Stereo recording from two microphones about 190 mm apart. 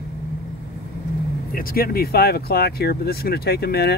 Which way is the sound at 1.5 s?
50° left (ahead or behind).